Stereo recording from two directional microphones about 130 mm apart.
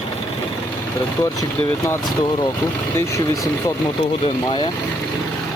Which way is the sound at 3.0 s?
20° left (ahead or behind).